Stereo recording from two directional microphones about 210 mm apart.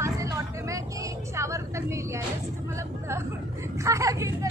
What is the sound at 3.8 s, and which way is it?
Speech, 15° right (ahead or behind).